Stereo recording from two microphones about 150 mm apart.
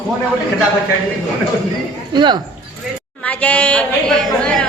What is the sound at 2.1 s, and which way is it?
Speech, 30° right (ahead or behind).